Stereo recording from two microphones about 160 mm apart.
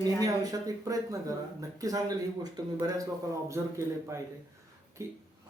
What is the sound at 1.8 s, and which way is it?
A man's voice, 25° right (ahead or behind).